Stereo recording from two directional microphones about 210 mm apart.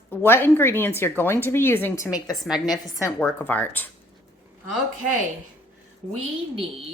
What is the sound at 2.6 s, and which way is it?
A woman's voice, 20° left (ahead or behind).